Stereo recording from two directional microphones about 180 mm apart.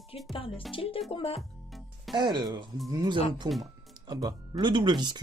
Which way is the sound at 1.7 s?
Centre (ahead or behind).